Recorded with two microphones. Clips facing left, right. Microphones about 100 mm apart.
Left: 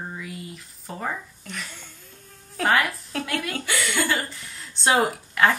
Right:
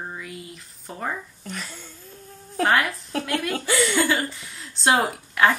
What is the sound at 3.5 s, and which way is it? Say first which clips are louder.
Speech: right 5 dB; 35° right (ahead or behind).